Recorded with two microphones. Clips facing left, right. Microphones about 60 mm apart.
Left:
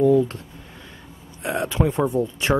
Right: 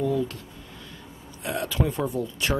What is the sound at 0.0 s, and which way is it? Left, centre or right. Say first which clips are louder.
Speech: left 9 dB; left.